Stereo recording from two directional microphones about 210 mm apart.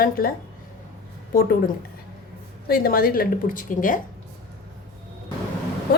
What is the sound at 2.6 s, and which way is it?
A woman's voice, 45° left (ahead or behind).